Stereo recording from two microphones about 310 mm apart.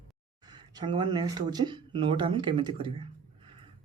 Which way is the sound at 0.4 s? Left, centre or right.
Centre.